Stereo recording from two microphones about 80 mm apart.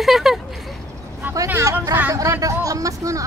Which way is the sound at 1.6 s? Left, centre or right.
Right.